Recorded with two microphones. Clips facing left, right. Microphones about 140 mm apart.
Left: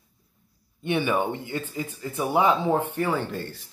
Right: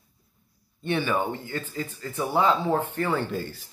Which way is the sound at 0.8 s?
15° left (ahead or behind).